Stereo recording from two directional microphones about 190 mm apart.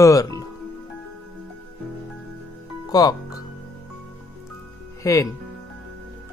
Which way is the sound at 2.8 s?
20° left (ahead or behind).